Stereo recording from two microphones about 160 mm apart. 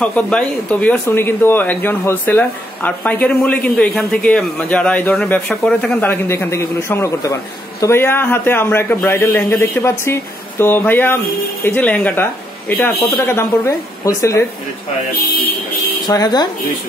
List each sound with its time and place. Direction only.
0.0 s speech: 5° left (ahead or behind)
16.1 s speech: 25° left (ahead or behind)